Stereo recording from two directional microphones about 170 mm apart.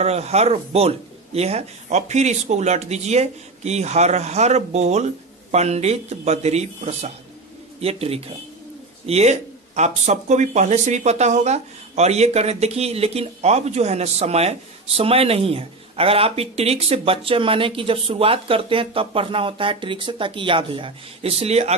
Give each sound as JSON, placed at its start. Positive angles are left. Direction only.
{"t": 0.0, "sound": "speech", "side_deg": -40}